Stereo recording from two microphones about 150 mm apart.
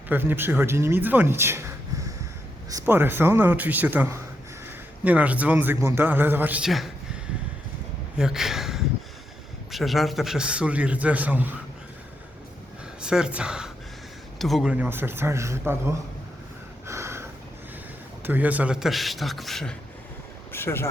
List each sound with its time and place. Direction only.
0.1 s a man's voice: 15° right (ahead or behind)
8.1 s a man's voice: 5° right (ahead or behind)
13.0 s a man's voice: 5° right (ahead or behind)
16.8 s a sound: 20° right (ahead or behind)
18.2 s a man's voice: 10° right (ahead or behind)
20.5 s speech: 15° left (ahead or behind)